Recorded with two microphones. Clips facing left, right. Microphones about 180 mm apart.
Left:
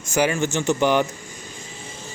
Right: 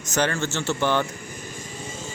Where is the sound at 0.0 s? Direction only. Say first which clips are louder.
Left 3 dB; 10° left (ahead or behind).